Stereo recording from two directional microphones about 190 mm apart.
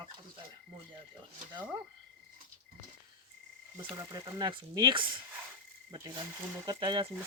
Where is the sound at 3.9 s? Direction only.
20° right (ahead or behind).